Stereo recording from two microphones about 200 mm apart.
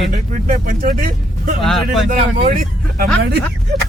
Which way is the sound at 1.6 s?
Centre (ahead or behind).